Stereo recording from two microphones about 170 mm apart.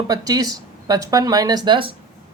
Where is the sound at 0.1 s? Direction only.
20° right (ahead or behind).